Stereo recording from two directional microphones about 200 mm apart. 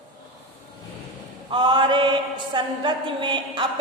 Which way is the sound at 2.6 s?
25° right (ahead or behind).